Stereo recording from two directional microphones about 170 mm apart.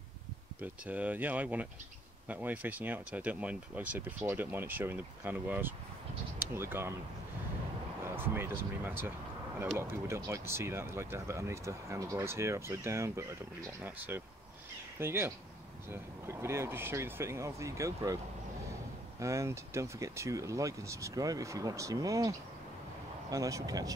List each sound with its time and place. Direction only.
0.6 s speech: 10° right (ahead or behind)
8.0 s speech: 15° right (ahead or behind)
23.3 s speech: 20° right (ahead or behind)